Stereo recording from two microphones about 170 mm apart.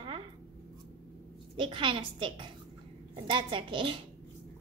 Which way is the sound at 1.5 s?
30° right (ahead or behind).